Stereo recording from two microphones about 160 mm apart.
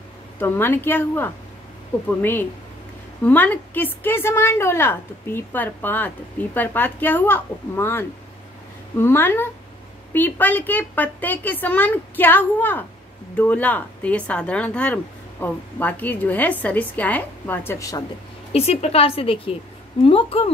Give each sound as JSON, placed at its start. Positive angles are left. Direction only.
{"t": 0.4, "sound": "a woman's voice", "side_deg": 15}
{"t": 18.5, "sound": "a woman's voice", "side_deg": 40}